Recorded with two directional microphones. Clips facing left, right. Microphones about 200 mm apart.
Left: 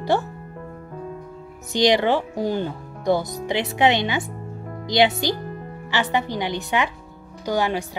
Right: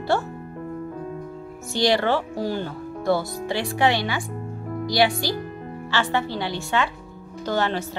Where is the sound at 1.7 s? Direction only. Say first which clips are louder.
Left 2 dB; 20° left (ahead or behind).